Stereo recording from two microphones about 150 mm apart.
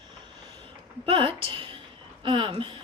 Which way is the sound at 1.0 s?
35° right (ahead or behind).